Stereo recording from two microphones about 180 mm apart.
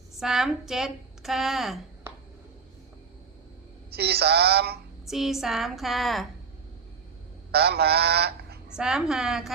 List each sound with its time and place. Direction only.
0.2 s a woman's voice: centre (ahead or behind)
3.9 s goose: 60° right (ahead or behind)
5.0 s a woman's voice: centre (ahead or behind)
7.5 s goose: 60° right (ahead or behind)
8.7 s a woman's voice: 5° right (ahead or behind)